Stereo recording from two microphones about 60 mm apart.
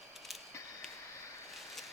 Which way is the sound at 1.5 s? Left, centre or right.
Centre.